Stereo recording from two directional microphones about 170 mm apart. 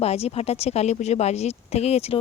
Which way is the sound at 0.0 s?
35° left (ahead or behind).